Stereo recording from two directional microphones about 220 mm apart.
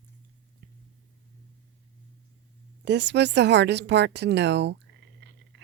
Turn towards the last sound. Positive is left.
turn(degrees=-55)  # may be behind; listen again after turning